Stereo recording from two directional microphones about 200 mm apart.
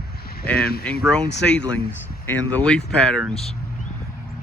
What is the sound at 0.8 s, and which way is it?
Speech, 5° left (ahead or behind).